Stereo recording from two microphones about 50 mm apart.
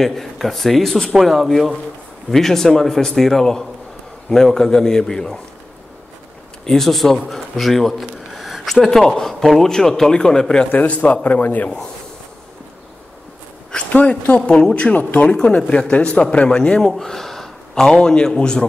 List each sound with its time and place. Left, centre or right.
0.0 s a man's voice: centre
6.6 s a man's voice: centre
10.7 s speech: left
13.8 s speech: left
14.5 s speech: centre
16.8 s a man's voice: centre